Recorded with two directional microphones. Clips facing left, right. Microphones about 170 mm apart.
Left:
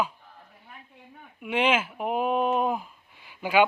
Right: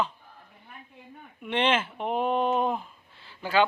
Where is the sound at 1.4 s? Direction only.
10° left (ahead or behind).